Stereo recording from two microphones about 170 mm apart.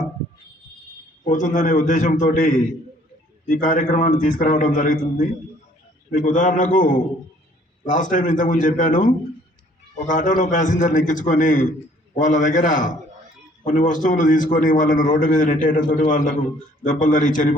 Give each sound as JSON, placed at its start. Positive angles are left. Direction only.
{"t": 1.2, "sound": "a man's voice", "side_deg": 50}